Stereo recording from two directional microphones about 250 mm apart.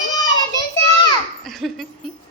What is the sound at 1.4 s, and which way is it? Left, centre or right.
Laughter, centre.